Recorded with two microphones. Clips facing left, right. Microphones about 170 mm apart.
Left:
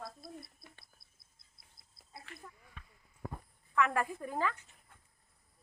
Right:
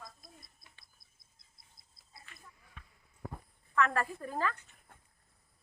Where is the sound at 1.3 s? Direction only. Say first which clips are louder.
Right 1 dB; 60° left (ahead or behind).